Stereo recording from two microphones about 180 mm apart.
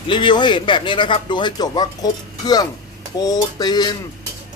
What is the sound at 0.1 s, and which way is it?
A man's voice, 25° left (ahead or behind).